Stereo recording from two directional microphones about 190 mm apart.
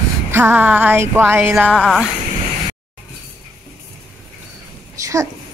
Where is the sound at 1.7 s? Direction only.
Centre (ahead or behind).